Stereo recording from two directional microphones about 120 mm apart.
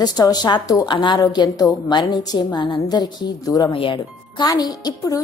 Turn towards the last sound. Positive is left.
turn(degrees=35)  # may be behind; listen again after turning